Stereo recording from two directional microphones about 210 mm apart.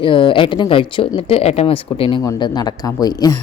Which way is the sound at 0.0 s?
25° left (ahead or behind).